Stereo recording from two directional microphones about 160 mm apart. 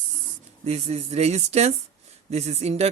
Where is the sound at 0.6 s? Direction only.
40° right (ahead or behind).